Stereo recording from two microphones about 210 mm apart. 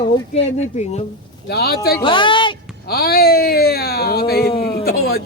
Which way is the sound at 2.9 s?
45° left (ahead or behind).